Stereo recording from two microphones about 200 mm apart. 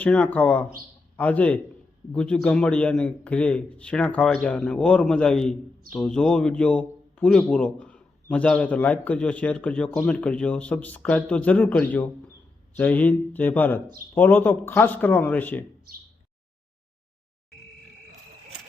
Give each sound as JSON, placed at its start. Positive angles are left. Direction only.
{"t": 0.0, "sound": "a man's voice", "side_deg": 5}